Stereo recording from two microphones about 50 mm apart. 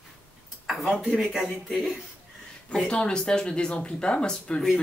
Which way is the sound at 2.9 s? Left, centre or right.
Centre.